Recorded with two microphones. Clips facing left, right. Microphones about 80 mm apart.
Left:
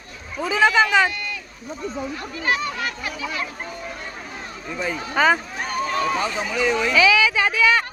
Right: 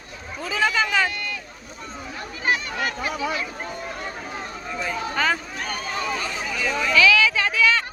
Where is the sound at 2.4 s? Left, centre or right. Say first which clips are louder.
Even; right.